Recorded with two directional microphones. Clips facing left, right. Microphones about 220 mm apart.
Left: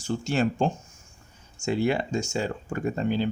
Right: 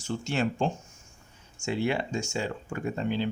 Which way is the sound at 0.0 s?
40° left (ahead or behind).